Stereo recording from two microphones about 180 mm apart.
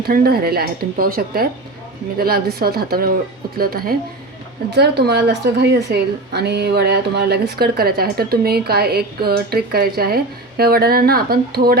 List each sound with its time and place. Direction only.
0.0 s a woman's voice: 55° right (ahead or behind)